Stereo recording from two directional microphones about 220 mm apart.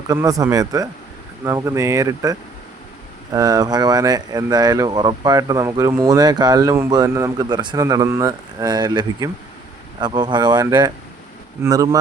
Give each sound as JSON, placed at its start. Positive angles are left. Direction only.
{"t": 0.1, "sound": "speech", "side_deg": -15}